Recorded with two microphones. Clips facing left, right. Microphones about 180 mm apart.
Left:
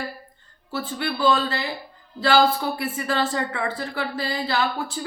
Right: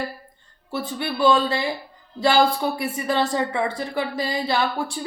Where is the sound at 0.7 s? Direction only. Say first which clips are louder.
Right 1 dB; 15° right (ahead or behind).